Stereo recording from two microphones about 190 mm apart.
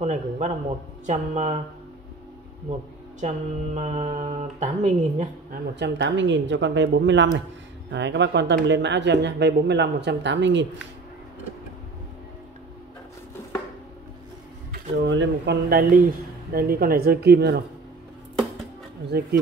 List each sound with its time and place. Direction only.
0.0 s speech: 35° right (ahead or behind)
3.2 s speech: 40° right (ahead or behind)
5.8 s speech: 70° right (ahead or behind)
14.7 s speech: 70° right (ahead or behind)
19.1 s speech: 60° right (ahead or behind)